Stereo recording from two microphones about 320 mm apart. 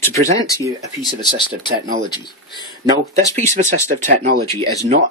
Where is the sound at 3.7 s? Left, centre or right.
Right.